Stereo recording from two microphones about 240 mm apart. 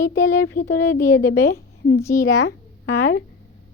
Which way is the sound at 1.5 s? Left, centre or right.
Left.